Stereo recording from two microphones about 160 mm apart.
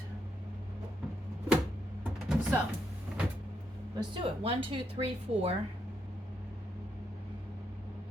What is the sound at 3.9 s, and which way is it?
Speech, 35° right (ahead or behind).